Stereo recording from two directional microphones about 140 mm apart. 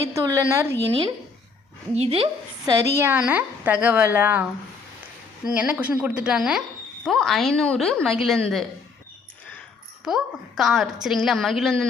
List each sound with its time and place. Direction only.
0.1 s speech: 20° right (ahead or behind)
2.0 s speech: 45° right (ahead or behind)
2.6 s speech: 25° right (ahead or behind)
3.1 s a woman's voice: 10° right (ahead or behind)
5.5 s a woman's voice: 10° right (ahead or behind)
10.0 s a woman's voice: 5° right (ahead or behind)